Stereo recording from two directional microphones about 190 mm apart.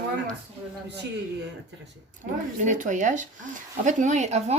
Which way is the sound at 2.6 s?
40° right (ahead or behind).